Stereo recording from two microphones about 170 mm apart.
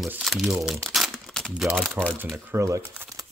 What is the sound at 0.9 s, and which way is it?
Crumpling, centre (ahead or behind).